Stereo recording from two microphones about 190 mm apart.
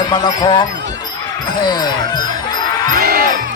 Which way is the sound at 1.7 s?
20° left (ahead or behind).